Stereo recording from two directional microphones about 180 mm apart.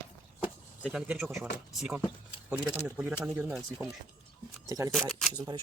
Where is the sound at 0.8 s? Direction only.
5° right (ahead or behind).